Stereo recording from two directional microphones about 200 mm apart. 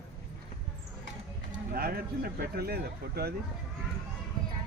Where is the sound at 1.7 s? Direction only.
50° right (ahead or behind).